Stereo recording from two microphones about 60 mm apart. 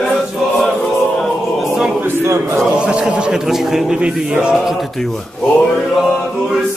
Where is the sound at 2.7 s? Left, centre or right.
Centre.